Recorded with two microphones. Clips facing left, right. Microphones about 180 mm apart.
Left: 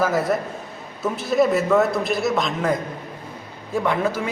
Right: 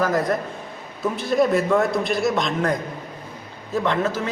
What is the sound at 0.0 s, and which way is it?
A man's voice, 5° left (ahead or behind).